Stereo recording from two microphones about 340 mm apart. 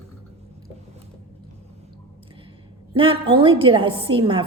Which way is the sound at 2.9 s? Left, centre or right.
Centre.